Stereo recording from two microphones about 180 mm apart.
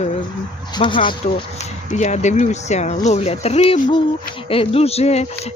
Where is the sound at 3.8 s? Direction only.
25° left (ahead or behind).